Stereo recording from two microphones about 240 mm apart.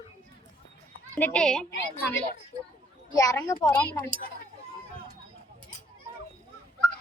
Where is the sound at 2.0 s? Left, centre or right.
Centre.